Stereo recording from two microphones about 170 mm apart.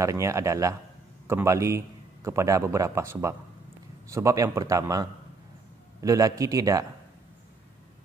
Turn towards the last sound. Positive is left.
turn(degrees=-20)  # may be behind; listen again after turning